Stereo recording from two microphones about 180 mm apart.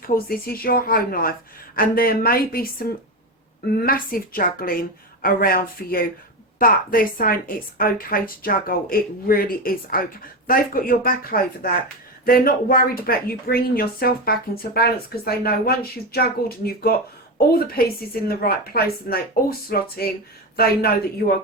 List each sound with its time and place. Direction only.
0.1 s a woman's voice: 55° left (ahead or behind)
17.3 s speech: 55° left (ahead or behind)